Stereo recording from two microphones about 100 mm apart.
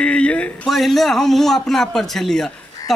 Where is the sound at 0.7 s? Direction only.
Centre (ahead or behind).